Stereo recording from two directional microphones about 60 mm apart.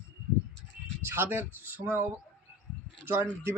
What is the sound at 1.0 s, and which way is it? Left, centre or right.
A man's voice, right.